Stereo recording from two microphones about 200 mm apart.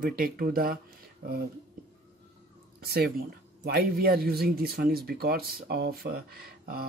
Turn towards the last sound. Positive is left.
turn(degrees=-50)  # may be behind; listen again after turning